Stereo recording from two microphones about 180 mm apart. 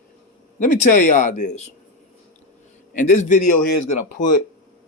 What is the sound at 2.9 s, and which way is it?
Speech, 45° left (ahead or behind).